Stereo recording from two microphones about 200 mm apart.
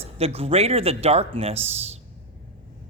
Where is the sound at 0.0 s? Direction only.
30° right (ahead or behind).